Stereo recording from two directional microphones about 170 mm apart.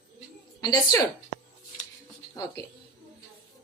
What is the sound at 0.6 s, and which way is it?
Speech, 20° left (ahead or behind).